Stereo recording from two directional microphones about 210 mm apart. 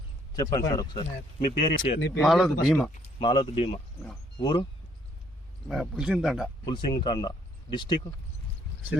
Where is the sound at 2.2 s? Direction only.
Centre (ahead or behind).